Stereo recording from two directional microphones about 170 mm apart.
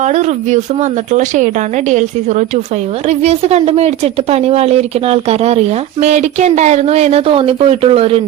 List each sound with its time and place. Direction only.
0.0 s a woman's voice: 45° right (ahead or behind)